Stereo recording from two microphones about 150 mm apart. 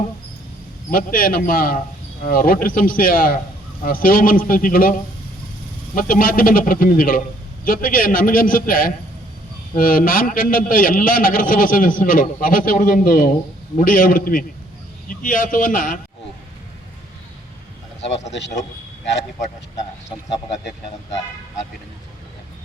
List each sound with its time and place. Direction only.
0.9 s a man's voice: 70° left (ahead or behind)